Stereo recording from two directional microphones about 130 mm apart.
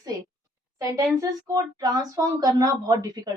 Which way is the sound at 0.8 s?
25° right (ahead or behind).